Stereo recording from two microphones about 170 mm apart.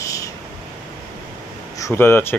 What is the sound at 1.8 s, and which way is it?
Speech, 15° left (ahead or behind).